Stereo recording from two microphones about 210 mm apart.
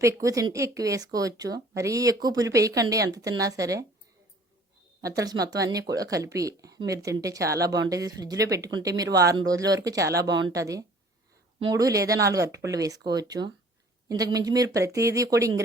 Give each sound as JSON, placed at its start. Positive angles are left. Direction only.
{"t": 0.0, "sound": "speech", "side_deg": -15}
{"t": 5.0, "sound": "speech", "side_deg": -15}